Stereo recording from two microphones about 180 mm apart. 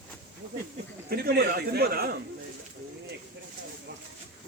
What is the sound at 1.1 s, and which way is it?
A man's voice, 60° right (ahead or behind).